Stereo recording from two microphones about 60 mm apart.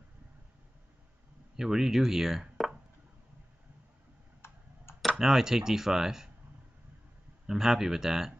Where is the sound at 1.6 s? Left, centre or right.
Centre.